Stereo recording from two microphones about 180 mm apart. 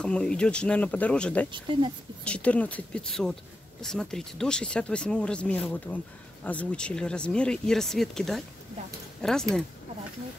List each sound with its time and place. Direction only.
0.0 s speech: 5° left (ahead or behind)
1.5 s speech: 30° right (ahead or behind)
2.2 s speech: 5° left (ahead or behind)